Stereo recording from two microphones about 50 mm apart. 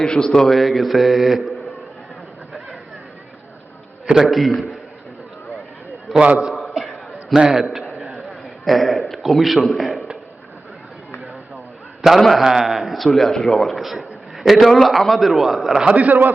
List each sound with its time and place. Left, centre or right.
0.0 s a man's voice: centre
4.0 s a man's voice: centre
4.3 s a man's voice: centre
6.1 s a man's voice: right
6.7 s a sound: centre
7.3 s a man's voice: centre
8.1 s a sound: centre
9.7 s a man's voice: centre
12.2 s a man's voice: centre
15.9 s a man's voice: right